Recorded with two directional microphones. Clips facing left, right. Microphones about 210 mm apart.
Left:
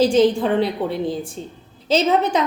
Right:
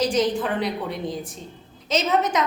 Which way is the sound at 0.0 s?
30° left (ahead or behind).